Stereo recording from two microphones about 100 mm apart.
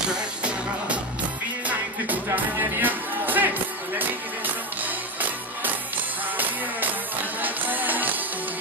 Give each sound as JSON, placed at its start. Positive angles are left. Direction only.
{"t": 2.3, "sound": "music", "side_deg": -20}
{"t": 6.3, "sound": "music", "side_deg": -15}